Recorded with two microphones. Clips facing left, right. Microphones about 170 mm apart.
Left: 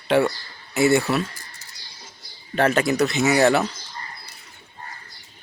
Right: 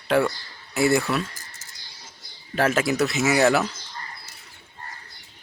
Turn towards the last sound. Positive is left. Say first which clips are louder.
# left 2 dB
turn(degrees=0)  # may be behind; listen again after turning